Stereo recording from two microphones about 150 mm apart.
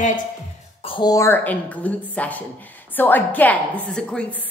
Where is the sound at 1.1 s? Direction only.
15° left (ahead or behind).